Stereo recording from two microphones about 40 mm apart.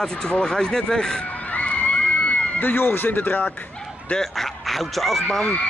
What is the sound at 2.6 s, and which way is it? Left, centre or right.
Speech, left.